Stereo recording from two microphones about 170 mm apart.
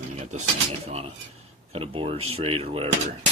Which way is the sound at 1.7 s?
35° right (ahead or behind).